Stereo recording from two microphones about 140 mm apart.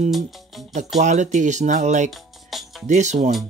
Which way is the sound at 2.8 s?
60° right (ahead or behind).